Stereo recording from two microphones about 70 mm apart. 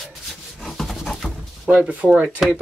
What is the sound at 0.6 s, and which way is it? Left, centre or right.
Rub, centre.